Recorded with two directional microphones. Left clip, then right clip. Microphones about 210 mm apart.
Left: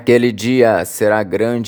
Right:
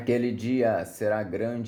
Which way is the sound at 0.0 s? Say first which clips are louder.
Left 14 dB; 40° left (ahead or behind).